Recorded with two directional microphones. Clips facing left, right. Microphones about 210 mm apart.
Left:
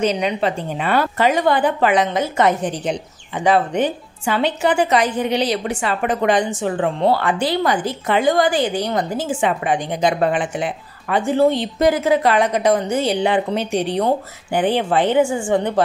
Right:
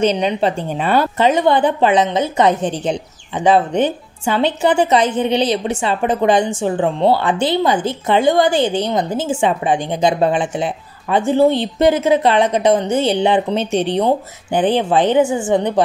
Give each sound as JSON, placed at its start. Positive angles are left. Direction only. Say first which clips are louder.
{"t": 0.0, "sound": "speech", "louder": "right 3 dB", "side_deg": -30}